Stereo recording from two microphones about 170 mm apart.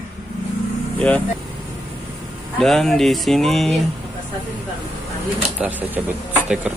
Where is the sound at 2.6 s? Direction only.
Centre (ahead or behind).